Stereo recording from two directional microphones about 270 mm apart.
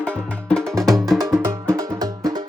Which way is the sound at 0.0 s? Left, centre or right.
Centre.